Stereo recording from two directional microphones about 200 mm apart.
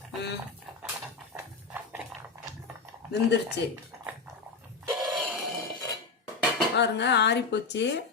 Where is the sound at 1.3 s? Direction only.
10° right (ahead or behind).